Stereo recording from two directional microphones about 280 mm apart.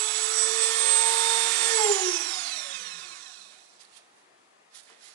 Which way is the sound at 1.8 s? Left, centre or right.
Centre.